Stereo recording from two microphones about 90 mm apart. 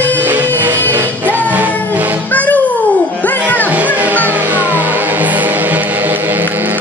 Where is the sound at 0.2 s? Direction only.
20° right (ahead or behind).